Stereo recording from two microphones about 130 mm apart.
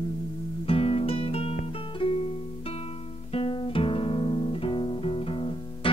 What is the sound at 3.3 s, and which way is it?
Music, 45° left (ahead or behind).